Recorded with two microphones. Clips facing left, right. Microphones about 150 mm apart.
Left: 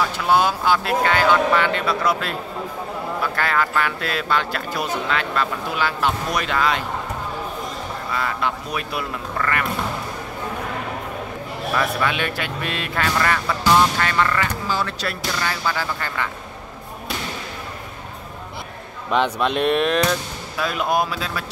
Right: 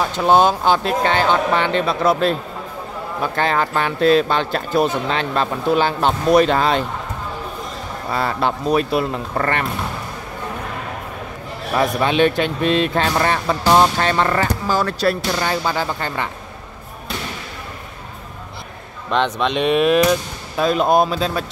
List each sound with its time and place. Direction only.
0.3 s speech: 25° right (ahead or behind)
3.3 s speech: 25° right (ahead or behind)
8.1 s speech: 30° right (ahead or behind)
11.7 s speech: 25° right (ahead or behind)
19.0 s speech: 10° left (ahead or behind)
20.5 s speech: 30° right (ahead or behind)